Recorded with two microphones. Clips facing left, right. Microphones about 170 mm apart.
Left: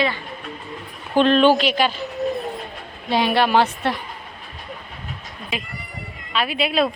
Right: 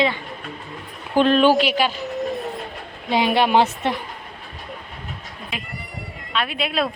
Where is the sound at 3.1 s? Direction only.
20° right (ahead or behind).